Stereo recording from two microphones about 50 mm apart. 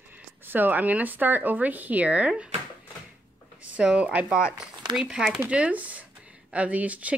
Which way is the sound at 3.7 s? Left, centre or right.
Right.